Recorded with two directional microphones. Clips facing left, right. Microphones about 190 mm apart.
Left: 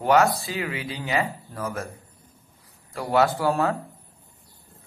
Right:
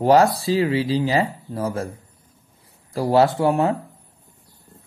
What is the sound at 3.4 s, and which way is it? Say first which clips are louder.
Speech: right 4 dB; 20° right (ahead or behind).